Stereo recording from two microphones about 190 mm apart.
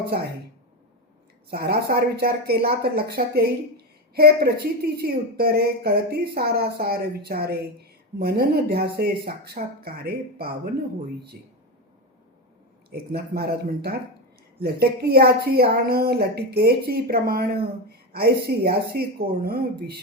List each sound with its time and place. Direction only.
1.5 s speech: 55° right (ahead or behind)
12.9 s speech: 55° right (ahead or behind)